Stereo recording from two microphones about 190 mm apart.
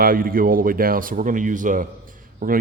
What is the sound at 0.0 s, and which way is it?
A man's voice, 50° right (ahead or behind).